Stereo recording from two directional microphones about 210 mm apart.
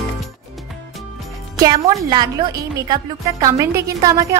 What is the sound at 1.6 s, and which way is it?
A woman's voice, 20° right (ahead or behind).